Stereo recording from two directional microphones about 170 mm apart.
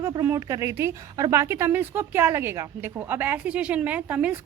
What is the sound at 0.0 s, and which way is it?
A woman's voice, 15° right (ahead or behind).